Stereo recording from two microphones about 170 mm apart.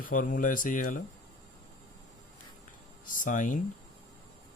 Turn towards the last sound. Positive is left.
turn(degrees=50)  # may be behind; listen again after turning